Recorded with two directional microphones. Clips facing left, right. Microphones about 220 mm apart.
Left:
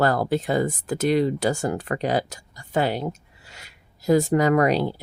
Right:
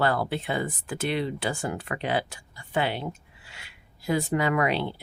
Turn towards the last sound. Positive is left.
turn(degrees=40)  # may be behind; listen again after turning